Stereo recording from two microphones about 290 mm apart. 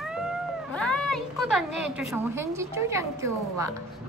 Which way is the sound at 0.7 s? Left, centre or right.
Centre.